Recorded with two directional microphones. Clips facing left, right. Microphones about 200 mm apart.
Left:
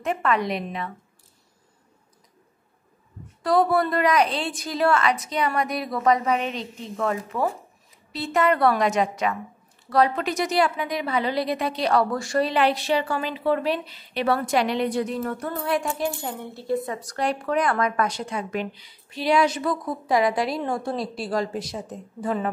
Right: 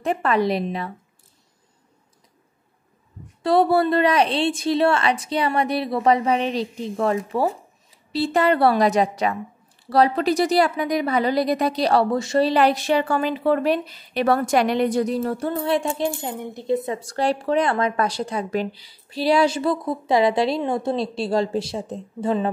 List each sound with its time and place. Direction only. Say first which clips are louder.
0.0 s a woman's voice: right 3 dB; 35° right (ahead or behind)
3.4 s a woman's voice: right 3 dB; 30° right (ahead or behind)